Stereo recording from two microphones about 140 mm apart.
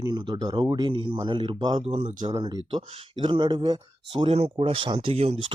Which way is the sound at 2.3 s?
30° right (ahead or behind).